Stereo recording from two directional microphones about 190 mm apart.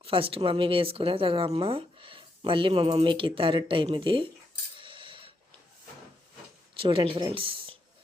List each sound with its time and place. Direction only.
0.0 s speech: 30° right (ahead or behind)
4.8 s coin: 25° right (ahead or behind)
6.7 s speech: 25° right (ahead or behind)